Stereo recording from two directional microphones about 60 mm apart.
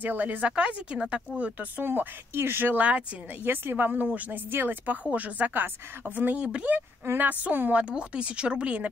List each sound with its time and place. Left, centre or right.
0.0 s speech: right
1.9 s speech: right
5.0 s speech: right